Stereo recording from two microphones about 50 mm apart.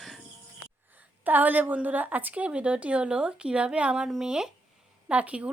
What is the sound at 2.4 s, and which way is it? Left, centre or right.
Speech, centre.